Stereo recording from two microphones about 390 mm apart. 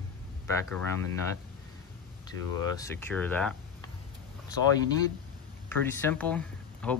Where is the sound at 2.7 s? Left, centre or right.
Centre.